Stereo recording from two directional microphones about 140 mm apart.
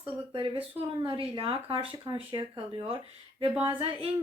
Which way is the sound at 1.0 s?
35° right (ahead or behind).